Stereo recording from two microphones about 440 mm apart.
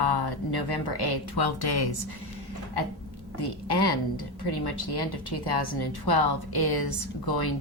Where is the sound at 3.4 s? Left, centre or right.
Left.